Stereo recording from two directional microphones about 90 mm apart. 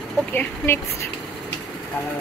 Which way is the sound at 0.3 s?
20° left (ahead or behind).